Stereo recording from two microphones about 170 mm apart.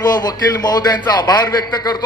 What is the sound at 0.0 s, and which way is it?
A man's voice, 25° left (ahead or behind).